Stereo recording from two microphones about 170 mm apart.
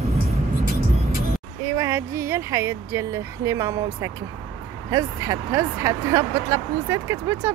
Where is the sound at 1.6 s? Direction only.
15° right (ahead or behind).